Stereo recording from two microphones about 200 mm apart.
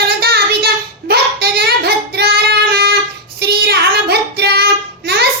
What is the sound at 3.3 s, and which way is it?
Child singing, 55° right (ahead or behind).